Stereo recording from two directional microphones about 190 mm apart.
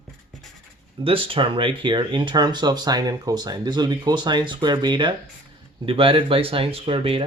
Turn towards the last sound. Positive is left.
turn(degrees=-30)  # may be behind; listen again after turning